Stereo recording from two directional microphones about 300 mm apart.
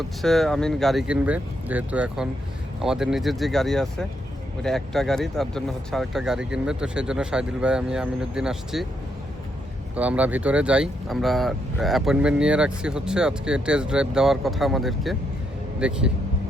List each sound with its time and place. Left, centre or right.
0.2 s speech: centre
9.9 s speech: centre